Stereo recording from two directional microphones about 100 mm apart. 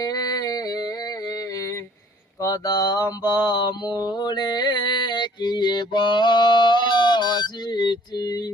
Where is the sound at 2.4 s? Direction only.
35° left (ahead or behind).